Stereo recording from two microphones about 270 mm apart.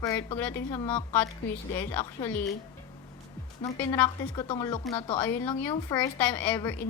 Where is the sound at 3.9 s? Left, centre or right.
Centre.